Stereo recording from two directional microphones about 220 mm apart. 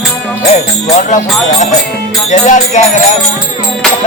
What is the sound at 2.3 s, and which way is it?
Music, 30° left (ahead or behind).